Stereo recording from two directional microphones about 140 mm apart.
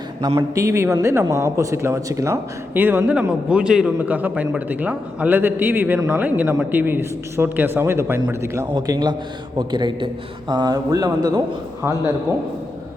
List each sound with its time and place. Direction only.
0.3 s a man's voice: 20° right (ahead or behind)